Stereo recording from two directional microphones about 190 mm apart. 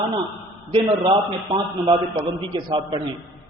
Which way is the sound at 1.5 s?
25° right (ahead or behind).